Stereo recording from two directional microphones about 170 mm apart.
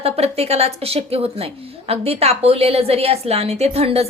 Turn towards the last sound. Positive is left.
turn(degrees=-35)  # may be behind; listen again after turning